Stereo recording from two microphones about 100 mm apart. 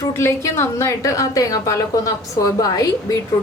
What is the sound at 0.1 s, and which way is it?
A woman's voice, 25° left (ahead or behind).